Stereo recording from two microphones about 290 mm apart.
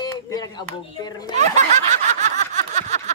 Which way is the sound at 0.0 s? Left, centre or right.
Centre.